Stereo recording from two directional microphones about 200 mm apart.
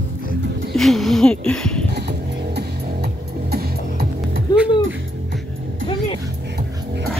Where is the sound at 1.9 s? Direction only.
55° right (ahead or behind).